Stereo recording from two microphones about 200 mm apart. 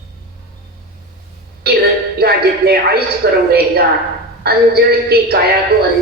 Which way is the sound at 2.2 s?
50° right (ahead or behind).